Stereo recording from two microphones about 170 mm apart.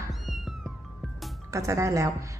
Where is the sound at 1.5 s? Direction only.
15° right (ahead or behind).